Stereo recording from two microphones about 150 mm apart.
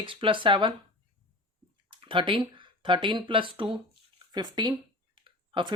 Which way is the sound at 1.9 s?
35° right (ahead or behind).